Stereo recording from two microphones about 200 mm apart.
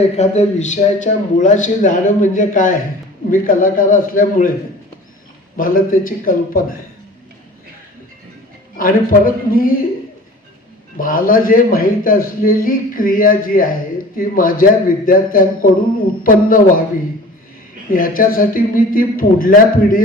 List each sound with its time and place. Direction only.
0.2 s a man's voice: 35° left (ahead or behind)
5.5 s a man's voice: 45° left (ahead or behind)
8.8 s a man's voice: 45° left (ahead or behind)
10.9 s a man's voice: 45° left (ahead or behind)
17.9 s a man's voice: 45° left (ahead or behind)